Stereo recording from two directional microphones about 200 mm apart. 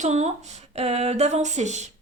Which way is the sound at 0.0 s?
35° right (ahead or behind).